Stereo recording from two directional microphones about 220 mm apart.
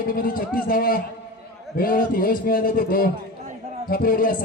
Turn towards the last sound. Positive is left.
turn(degrees=40)  # may be behind; listen again after turning